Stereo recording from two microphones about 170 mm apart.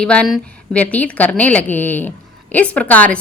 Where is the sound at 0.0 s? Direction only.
5° left (ahead or behind).